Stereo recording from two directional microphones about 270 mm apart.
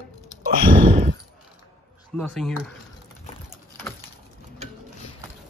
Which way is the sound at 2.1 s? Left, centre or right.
Centre.